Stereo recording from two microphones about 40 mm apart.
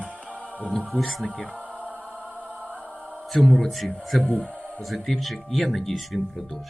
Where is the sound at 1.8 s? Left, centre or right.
Left.